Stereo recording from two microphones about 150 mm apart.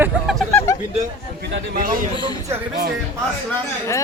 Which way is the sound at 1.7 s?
70° right (ahead or behind).